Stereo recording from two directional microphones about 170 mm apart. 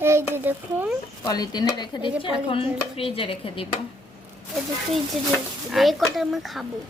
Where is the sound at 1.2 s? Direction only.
20° left (ahead or behind).